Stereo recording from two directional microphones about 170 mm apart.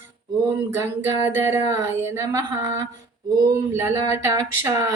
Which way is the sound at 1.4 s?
15° right (ahead or behind).